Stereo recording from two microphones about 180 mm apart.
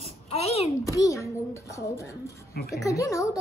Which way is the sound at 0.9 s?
15° left (ahead or behind).